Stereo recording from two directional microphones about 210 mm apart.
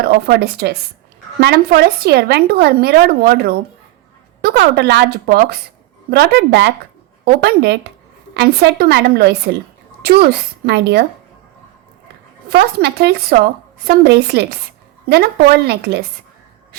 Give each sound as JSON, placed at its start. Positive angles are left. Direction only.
{"t": 0.0, "sound": "a woman's voice", "side_deg": -50}
{"t": 12.5, "sound": "a woman's voice", "side_deg": -50}